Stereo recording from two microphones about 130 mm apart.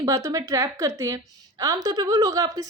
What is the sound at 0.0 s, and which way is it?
A woman's voice, 25° right (ahead or behind).